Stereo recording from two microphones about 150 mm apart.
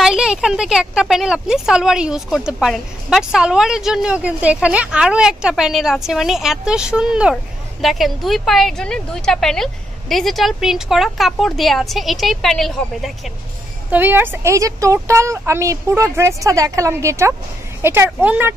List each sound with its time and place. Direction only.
0.0 s a woman's voice: 5° right (ahead or behind)
13.8 s a woman's voice: 15° right (ahead or behind)